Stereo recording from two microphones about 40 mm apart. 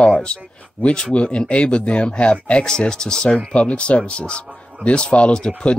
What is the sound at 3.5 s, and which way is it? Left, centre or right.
Speech, left.